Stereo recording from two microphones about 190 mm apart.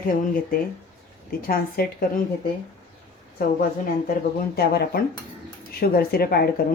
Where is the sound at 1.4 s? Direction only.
50° left (ahead or behind).